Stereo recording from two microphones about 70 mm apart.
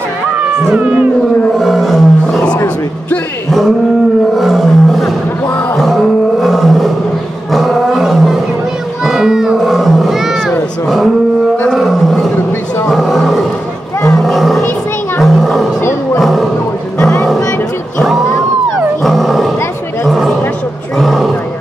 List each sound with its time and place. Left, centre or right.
1.6 s roar: centre
4.4 s roar: centre
9.0 s roaring cats: centre
11.7 s roar: centre
15.1 s roaring cats: centre
17.0 s music: left
19.0 s roaring cats: centre
20.1 s a sound: centre
21.0 s vehicle: centre